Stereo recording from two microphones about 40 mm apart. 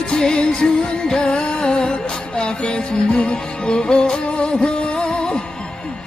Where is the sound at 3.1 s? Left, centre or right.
Left.